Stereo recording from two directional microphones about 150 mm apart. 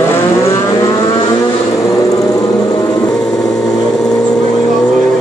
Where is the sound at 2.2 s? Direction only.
25° left (ahead or behind).